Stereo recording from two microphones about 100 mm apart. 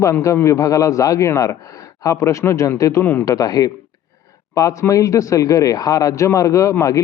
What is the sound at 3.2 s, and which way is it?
Speech, 35° left (ahead or behind).